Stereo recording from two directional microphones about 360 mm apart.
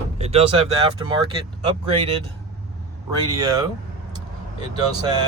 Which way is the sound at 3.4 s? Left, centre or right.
Centre.